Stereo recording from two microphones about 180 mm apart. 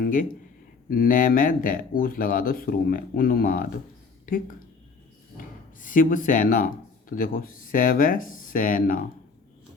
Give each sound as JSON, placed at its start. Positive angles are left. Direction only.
{"t": 0.0, "sound": "speech", "side_deg": 50}